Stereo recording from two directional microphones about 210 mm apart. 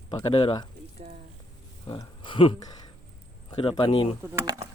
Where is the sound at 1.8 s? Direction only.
20° left (ahead or behind).